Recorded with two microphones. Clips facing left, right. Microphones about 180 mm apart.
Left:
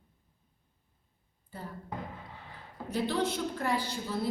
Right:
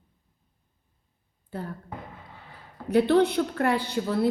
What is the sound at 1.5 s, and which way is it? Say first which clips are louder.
Speech: right 8 dB; 65° right (ahead or behind).